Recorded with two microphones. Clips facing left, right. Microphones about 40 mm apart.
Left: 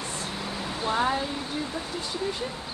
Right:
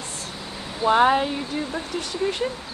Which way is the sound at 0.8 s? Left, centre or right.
Right.